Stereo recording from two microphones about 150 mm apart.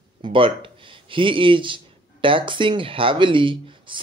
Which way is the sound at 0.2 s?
35° right (ahead or behind).